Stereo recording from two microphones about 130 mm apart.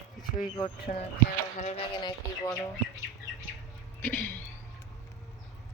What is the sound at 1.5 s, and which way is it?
Speech, 55° left (ahead or behind).